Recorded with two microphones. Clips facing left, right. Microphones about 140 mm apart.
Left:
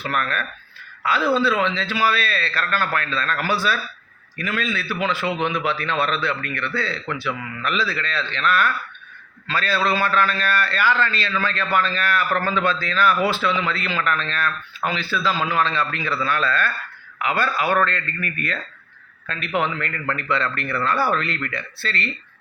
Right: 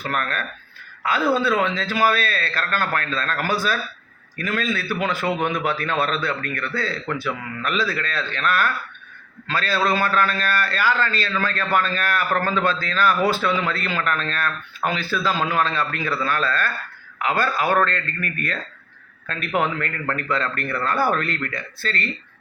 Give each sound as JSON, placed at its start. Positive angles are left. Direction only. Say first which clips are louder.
{"t": 0.0, "sound": "a man's voice", "louder": "left 1 dB", "side_deg": -40}
{"t": 19.5, "sound": "a man's voice", "louder": "right 1 dB", "side_deg": -45}